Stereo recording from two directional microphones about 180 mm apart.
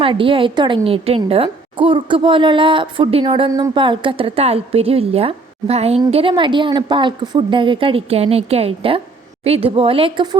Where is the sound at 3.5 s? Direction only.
20° right (ahead or behind).